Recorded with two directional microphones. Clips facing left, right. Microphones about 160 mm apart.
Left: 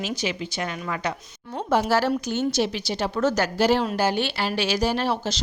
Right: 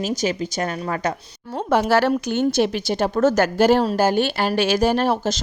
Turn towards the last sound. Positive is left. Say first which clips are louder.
# right 5 dB
turn(degrees=-45)  # may be behind; listen again after turning